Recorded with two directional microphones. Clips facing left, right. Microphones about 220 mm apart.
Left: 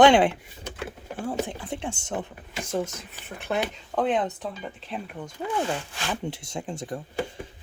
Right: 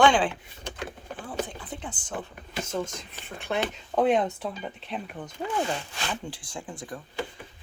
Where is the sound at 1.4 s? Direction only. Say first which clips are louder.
Left 6 dB; 30° left (ahead or behind).